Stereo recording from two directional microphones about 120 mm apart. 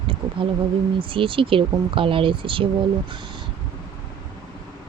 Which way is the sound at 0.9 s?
45° right (ahead or behind).